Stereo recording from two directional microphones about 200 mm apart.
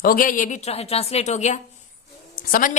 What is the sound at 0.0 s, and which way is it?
A woman's voice, 45° left (ahead or behind).